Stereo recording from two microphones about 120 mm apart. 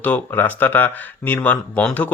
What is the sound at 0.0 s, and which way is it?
Speech, 15° left (ahead or behind).